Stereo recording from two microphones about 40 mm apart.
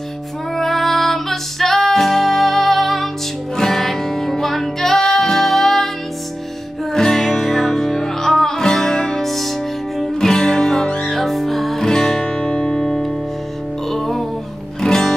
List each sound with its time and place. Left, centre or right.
0.6 s music: centre
6.9 s music: centre
9.2 s music: centre
14.8 s music: centre